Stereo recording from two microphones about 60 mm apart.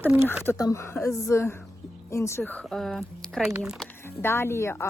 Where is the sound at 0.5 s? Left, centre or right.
Left.